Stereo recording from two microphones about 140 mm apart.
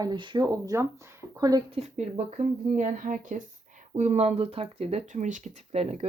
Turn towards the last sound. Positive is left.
turn(degrees=-50)  # may be behind; listen again after turning